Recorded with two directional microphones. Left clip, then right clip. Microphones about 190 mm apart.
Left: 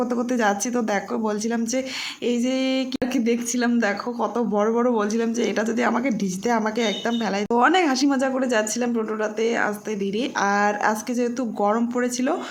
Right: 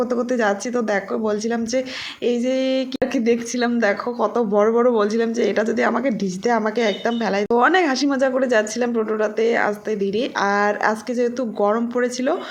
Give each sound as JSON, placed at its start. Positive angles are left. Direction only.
{"t": 0.0, "sound": "speech", "side_deg": 0}